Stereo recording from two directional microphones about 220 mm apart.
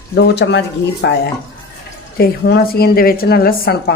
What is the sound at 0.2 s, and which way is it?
Speech, 50° left (ahead or behind).